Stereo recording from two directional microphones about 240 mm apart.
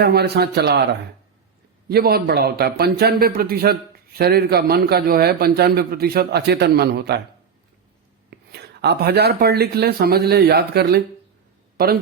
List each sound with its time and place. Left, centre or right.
0.0 s a man's voice: right
1.9 s a man's voice: right
8.3 s a man's voice: right